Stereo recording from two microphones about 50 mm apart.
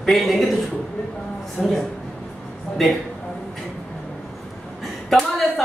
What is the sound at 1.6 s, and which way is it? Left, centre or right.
Speech, centre.